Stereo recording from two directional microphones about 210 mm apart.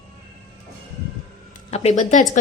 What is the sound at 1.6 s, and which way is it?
Speech, 30° left (ahead or behind).